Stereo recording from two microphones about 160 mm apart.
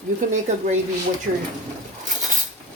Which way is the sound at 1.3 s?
60° right (ahead or behind).